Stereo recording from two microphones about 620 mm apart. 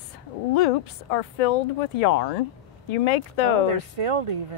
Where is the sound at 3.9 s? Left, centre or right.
Right.